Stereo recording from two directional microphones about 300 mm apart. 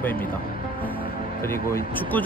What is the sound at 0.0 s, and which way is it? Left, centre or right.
Speech, centre.